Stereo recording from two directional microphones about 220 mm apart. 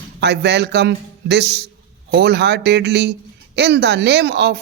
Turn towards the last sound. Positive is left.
turn(degrees=-50)  # may be behind; listen again after turning